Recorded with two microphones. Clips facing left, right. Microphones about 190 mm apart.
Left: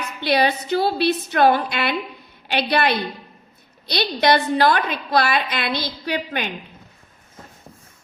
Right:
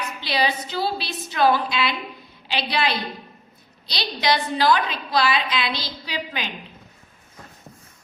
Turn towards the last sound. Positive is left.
turn(degrees=60)  # may be behind; listen again after turning